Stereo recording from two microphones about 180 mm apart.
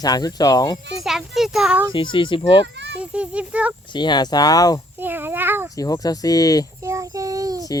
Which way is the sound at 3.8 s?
25° left (ahead or behind).